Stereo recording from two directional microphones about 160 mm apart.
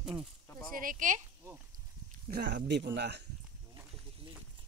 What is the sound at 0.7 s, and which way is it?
Speech, 55° right (ahead or behind).